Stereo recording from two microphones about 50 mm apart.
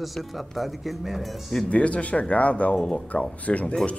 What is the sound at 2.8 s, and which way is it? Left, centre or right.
Speech, centre.